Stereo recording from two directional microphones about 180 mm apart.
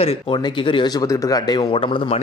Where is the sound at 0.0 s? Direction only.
30° left (ahead or behind).